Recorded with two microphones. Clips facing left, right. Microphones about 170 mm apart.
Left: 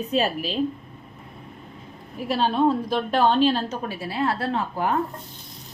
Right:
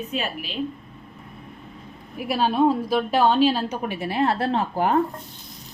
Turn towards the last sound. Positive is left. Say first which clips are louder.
# right 3 dB
turn(degrees=-30)  # may be behind; listen again after turning